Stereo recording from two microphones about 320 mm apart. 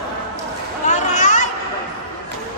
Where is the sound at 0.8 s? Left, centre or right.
Left.